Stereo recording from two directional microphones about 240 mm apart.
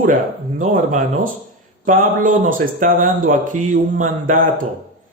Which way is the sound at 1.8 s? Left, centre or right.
Right.